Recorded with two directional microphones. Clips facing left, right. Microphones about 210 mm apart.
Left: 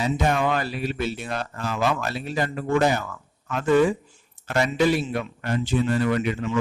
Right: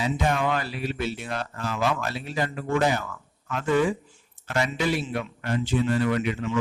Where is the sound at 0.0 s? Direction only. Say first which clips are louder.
Left 2 dB; 45° left (ahead or behind).